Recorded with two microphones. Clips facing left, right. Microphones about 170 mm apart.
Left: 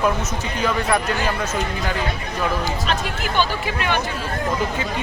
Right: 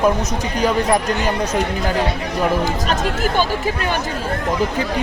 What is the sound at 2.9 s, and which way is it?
Speech, 40° right (ahead or behind).